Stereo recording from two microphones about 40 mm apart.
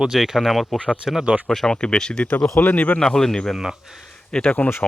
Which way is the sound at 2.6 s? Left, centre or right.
Left.